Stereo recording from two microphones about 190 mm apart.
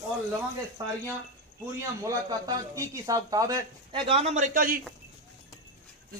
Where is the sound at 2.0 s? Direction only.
15° right (ahead or behind).